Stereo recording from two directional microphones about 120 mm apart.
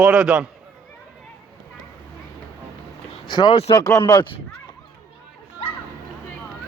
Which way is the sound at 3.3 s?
40° left (ahead or behind).